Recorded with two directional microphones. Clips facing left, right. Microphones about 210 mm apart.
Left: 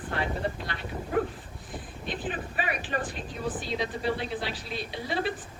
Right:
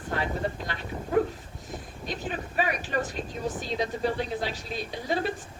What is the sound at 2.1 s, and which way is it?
Speech, 40° right (ahead or behind).